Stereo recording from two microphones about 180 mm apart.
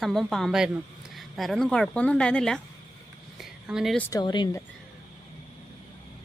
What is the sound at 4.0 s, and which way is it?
Speech, 20° left (ahead or behind).